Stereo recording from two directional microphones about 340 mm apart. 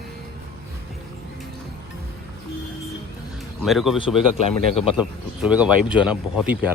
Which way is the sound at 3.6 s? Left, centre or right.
Centre.